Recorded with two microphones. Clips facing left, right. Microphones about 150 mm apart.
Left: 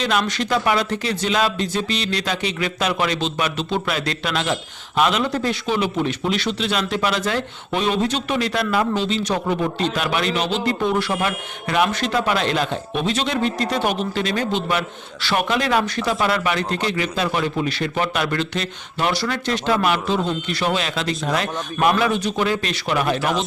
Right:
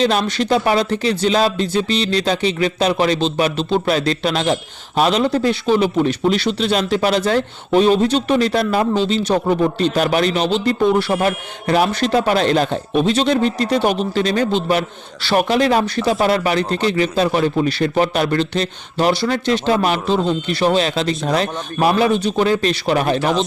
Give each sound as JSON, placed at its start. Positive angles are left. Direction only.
{"t": 0.0, "sound": "a man's voice", "side_deg": -30}